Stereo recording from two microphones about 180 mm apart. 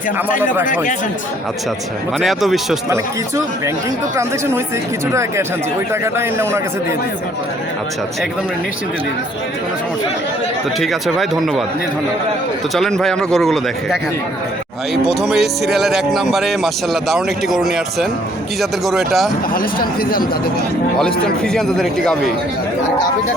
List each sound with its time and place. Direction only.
0.3 s speech: 45° left (ahead or behind)
2.1 s speech: centre (ahead or behind)
5.9 s a man's voice: 15° right (ahead or behind)
10.8 s speech: centre (ahead or behind)
12.7 s speech: centre (ahead or behind)
15.0 s speech: centre (ahead or behind)
19.5 s speech: 55° left (ahead or behind)
21.0 s speech: 5° left (ahead or behind)